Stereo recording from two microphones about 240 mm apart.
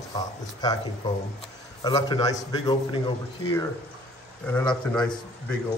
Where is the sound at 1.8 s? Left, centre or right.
Centre.